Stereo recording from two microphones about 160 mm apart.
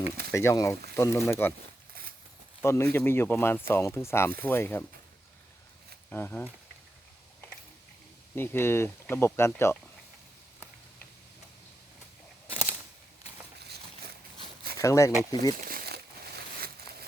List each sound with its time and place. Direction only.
0.3 s speech: 20° left (ahead or behind)
2.6 s speech: 15° left (ahead or behind)
6.1 s speech: 10° left (ahead or behind)
8.4 s speech: 15° left (ahead or behind)
13.6 s a sound: 90° right
14.8 s speech: 20° left (ahead or behind)
15.6 s crumpling: 70° right (ahead or behind)